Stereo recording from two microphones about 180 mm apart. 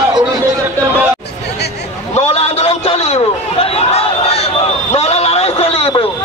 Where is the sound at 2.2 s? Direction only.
35° left (ahead or behind).